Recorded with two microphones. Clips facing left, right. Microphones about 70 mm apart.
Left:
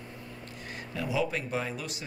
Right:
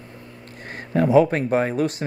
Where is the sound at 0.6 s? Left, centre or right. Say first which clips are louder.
Right 15 dB; right.